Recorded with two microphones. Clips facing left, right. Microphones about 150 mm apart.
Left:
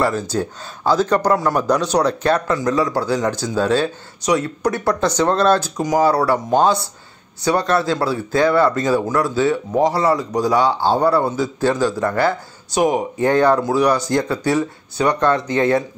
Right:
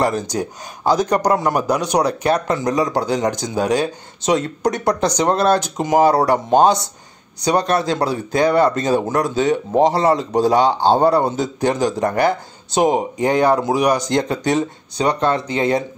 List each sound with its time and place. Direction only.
0.0 s a man's voice: 20° right (ahead or behind)